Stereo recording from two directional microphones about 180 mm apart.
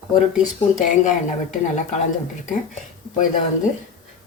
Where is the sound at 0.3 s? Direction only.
45° left (ahead or behind).